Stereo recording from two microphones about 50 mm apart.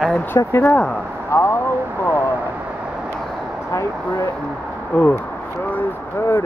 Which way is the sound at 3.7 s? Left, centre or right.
Left.